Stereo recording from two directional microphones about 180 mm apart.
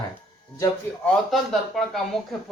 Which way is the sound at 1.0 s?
Centre (ahead or behind).